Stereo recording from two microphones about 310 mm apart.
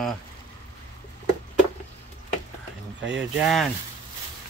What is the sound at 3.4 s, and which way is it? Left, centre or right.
Speech, centre.